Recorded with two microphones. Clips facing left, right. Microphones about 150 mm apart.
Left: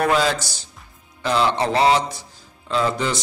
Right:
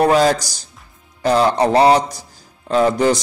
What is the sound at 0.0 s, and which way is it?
A man's voice, 40° right (ahead or behind).